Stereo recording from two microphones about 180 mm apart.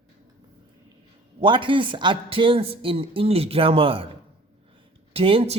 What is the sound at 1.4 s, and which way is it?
A man's voice, 30° right (ahead or behind).